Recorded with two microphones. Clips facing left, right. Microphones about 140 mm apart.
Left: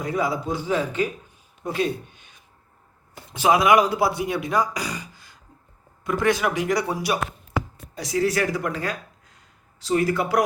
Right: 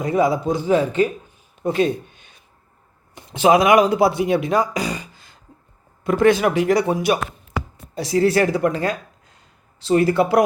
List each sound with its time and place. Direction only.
0.0 s speech: 20° right (ahead or behind)
1.6 s speech: 25° right (ahead or behind)
3.2 s speech: 25° right (ahead or behind)